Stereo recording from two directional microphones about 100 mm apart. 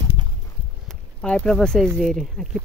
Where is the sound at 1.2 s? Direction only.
10° left (ahead or behind).